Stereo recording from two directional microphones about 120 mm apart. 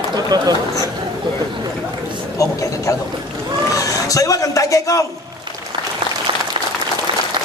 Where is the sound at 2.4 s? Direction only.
30° left (ahead or behind).